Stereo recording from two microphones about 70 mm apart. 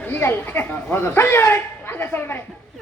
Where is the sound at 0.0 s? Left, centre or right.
Left.